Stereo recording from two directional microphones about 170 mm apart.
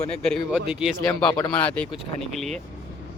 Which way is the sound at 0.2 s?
Centre (ahead or behind).